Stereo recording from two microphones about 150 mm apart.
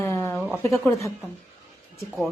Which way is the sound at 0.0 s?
15° left (ahead or behind).